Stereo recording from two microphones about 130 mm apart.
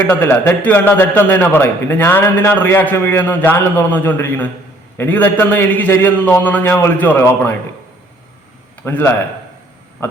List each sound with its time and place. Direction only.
0.1 s a man's voice: 15° left (ahead or behind)
8.8 s a man's voice: 15° left (ahead or behind)